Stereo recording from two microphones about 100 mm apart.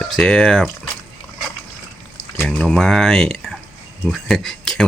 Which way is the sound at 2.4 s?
5° left (ahead or behind).